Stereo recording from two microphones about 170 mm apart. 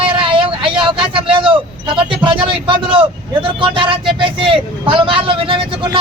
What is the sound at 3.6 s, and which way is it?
A woman's voice, 30° right (ahead or behind).